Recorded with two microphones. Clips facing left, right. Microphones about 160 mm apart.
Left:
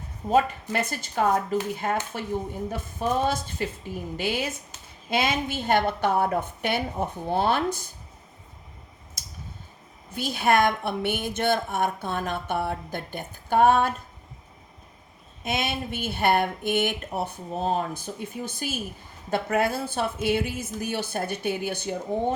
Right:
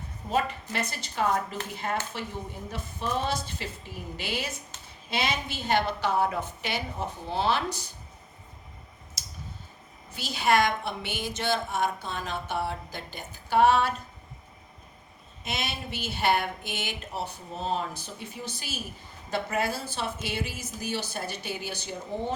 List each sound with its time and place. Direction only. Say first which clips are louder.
0.3 s a woman's voice: left 6 dB; 50° left (ahead or behind)
10.1 s a woman's voice: left 2 dB; 55° left (ahead or behind)
15.4 s a woman's voice: left 6 dB; 50° left (ahead or behind)